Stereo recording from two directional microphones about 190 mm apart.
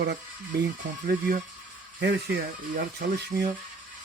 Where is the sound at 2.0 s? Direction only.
65° right (ahead or behind).